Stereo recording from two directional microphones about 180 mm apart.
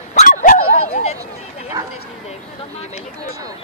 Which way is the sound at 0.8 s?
35° left (ahead or behind).